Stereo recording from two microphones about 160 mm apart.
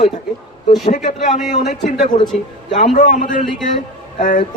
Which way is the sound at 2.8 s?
50° left (ahead or behind).